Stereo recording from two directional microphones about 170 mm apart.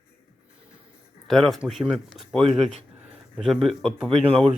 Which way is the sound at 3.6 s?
5° right (ahead or behind).